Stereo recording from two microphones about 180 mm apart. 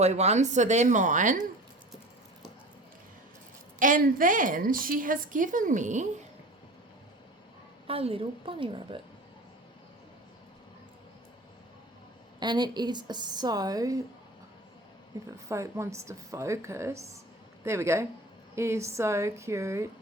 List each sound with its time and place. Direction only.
0.0 s speech: 40° right (ahead or behind)
3.8 s a woman's voice: 50° right (ahead or behind)
7.9 s a woman's voice: 30° right (ahead or behind)
12.4 s a woman's voice: 25° right (ahead or behind)
15.4 s a woman's voice: 15° right (ahead or behind)